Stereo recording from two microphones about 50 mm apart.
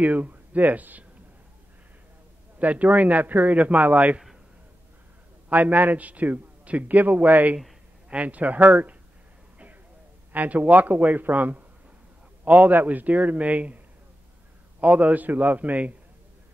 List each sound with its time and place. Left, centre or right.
0.0 s a man's voice: right
2.6 s a man's voice: right
5.5 s a man's voice: right
10.3 s a man's voice: right
14.8 s a man's voice: right